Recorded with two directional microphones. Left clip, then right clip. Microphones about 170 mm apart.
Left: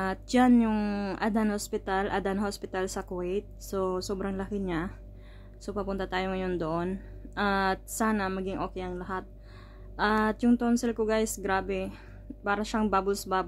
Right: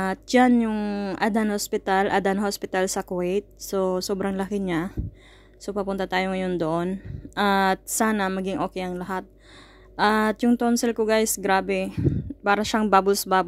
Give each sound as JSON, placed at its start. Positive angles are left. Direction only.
{"t": 0.0, "sound": "speech", "side_deg": -40}
{"t": 1.2, "sound": "a woman's voice", "side_deg": -40}